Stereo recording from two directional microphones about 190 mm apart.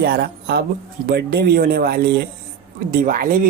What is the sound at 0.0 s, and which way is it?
Speech, 55° right (ahead or behind).